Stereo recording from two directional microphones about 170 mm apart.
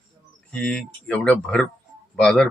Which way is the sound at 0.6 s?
5° left (ahead or behind).